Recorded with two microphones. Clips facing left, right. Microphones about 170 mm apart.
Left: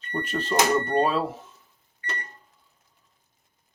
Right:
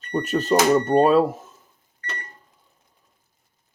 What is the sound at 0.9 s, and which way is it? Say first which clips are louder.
Speech: right 7 dB; 40° right (ahead or behind).